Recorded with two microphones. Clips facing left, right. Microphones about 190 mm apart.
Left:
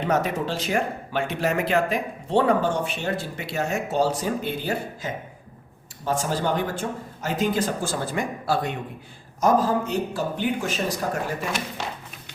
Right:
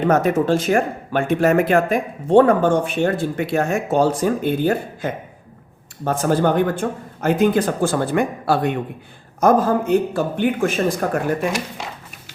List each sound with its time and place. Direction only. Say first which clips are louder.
0.0 s speech: right 7 dB; 50° right (ahead or behind)